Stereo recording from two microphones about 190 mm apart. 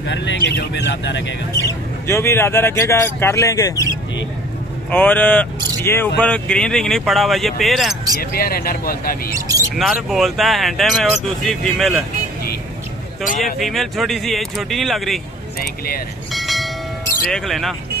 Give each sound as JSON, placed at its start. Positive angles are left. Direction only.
{"t": 0.0, "sound": "speech", "side_deg": 70}
{"t": 1.5, "sound": "speech", "side_deg": 15}
{"t": 4.9, "sound": "speech", "side_deg": 10}
{"t": 8.2, "sound": "speech", "side_deg": 50}
{"t": 9.3, "sound": "speech", "side_deg": -20}
{"t": 9.8, "sound": "speech", "side_deg": 0}
{"t": 13.6, "sound": "speech", "side_deg": 0}
{"t": 16.3, "sound": "train", "side_deg": 0}
{"t": 17.3, "sound": "speech", "side_deg": 0}